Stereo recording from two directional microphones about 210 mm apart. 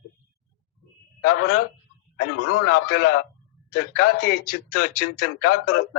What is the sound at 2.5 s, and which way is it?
Speech, 90° left.